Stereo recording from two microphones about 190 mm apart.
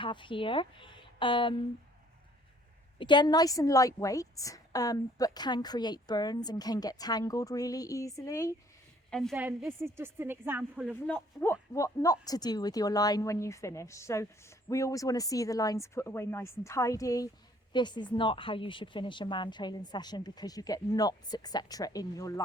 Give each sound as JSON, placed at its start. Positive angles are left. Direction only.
{"t": 0.0, "sound": "speech", "side_deg": 25}
{"t": 3.0, "sound": "a woman's voice", "side_deg": 25}
{"t": 9.0, "sound": "a woman's voice", "side_deg": 5}
{"t": 9.3, "sound": "a woman's voice", "side_deg": -10}
{"t": 11.0, "sound": "a woman's voice", "side_deg": 10}